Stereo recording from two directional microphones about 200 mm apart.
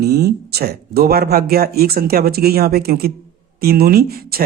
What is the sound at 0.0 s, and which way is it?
Speech, 50° right (ahead or behind).